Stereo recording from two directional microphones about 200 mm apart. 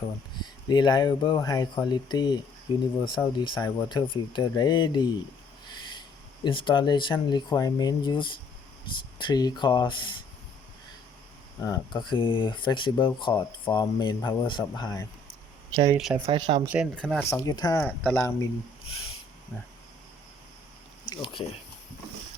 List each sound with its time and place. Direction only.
0.7 s speech: 20° left (ahead or behind)
11.6 s speech: 20° left (ahead or behind)
15.7 s speech: 20° right (ahead or behind)
16.0 s speech: centre (ahead or behind)
16.2 s speech: 25° right (ahead or behind)
16.6 s speech: 5° right (ahead or behind)
17.2 s speech: 15° left (ahead or behind)
21.1 s speech: 25° left (ahead or behind)